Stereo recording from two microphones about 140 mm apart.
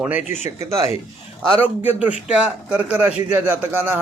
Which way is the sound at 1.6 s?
15° right (ahead or behind).